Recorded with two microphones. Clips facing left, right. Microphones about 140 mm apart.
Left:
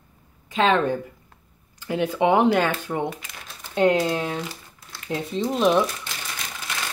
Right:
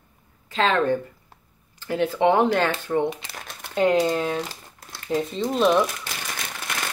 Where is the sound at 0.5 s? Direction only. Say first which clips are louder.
Left 1 dB; 15° left (ahead or behind).